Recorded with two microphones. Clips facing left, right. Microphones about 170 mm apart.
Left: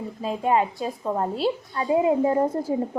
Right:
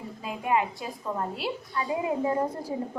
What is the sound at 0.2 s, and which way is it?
A woman's voice, 30° left (ahead or behind).